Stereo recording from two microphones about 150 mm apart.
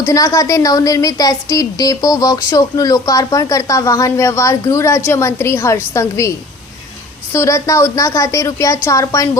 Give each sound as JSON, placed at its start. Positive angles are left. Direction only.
{"t": 0.0, "sound": "a woman's voice", "side_deg": 20}
{"t": 7.3, "sound": "a woman's voice", "side_deg": 20}